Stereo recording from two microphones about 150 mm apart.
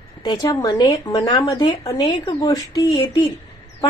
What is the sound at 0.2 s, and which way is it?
Speech, 30° left (ahead or behind).